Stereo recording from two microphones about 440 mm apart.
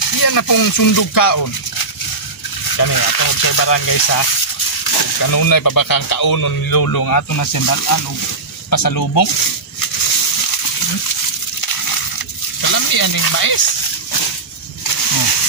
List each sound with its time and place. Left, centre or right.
0.1 s speech: left
2.7 s speech: left
12.6 s a sound: left